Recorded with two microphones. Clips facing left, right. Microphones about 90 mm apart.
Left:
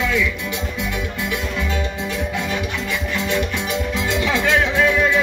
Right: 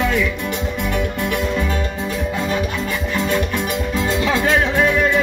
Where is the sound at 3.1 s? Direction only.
45° right (ahead or behind).